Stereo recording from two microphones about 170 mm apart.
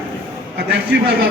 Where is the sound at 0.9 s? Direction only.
90° right.